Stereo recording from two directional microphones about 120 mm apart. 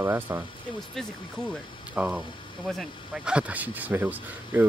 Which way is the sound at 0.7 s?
5° left (ahead or behind).